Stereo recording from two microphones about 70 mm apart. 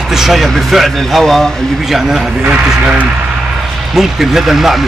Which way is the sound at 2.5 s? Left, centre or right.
Centre.